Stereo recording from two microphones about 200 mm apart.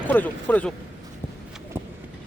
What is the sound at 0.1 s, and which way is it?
Speech, 10° left (ahead or behind).